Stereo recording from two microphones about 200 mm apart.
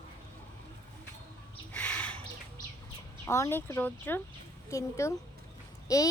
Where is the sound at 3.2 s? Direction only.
15° left (ahead or behind).